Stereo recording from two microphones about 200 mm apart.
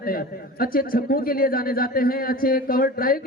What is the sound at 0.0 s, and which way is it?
A man's voice, 45° left (ahead or behind).